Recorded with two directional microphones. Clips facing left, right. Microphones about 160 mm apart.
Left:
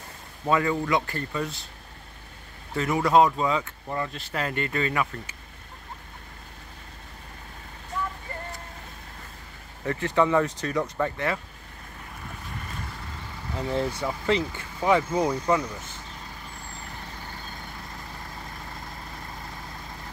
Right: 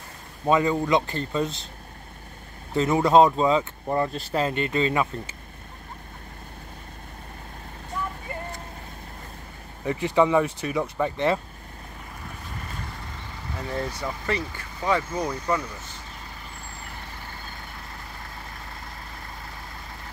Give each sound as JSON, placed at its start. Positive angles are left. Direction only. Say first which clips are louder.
{"t": 0.5, "sound": "speech", "louder": "right 3 dB", "side_deg": -20}
{"t": 2.7, "sound": "speech", "louder": "right 3 dB", "side_deg": -25}
{"t": 9.8, "sound": "speech", "louder": "right 2 dB", "side_deg": -15}
{"t": 11.1, "sound": "speech", "louder": "right 5 dB", "side_deg": -25}
{"t": 13.6, "sound": "speech", "louder": "left 3 dB", "side_deg": 15}